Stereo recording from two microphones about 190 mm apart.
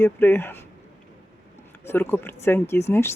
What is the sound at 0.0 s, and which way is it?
Speech, 10° left (ahead or behind).